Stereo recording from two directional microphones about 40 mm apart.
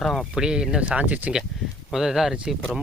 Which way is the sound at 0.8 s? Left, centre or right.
Right.